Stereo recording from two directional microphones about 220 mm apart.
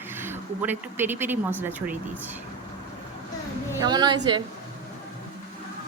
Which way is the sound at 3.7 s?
20° right (ahead or behind).